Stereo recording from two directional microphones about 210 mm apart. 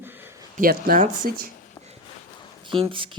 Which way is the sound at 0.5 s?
45° right (ahead or behind).